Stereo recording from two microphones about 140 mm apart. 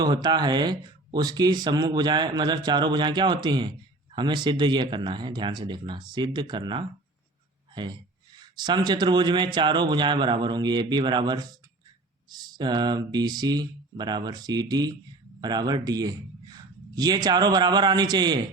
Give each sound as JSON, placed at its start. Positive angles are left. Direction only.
{"t": 0.0, "sound": "a man's voice", "side_deg": -30}